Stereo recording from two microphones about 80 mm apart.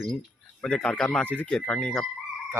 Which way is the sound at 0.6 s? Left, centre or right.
Centre.